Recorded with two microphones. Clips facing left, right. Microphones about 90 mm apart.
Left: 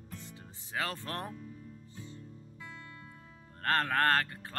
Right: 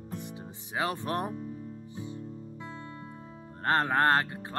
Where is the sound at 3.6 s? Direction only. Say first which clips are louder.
Right 4 dB; 20° right (ahead or behind).